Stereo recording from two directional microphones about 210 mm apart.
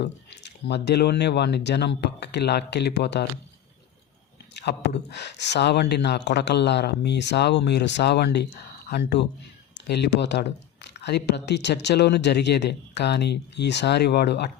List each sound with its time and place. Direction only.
0.0 s speech: 50° left (ahead or behind)
4.5 s speech: 55° left (ahead or behind)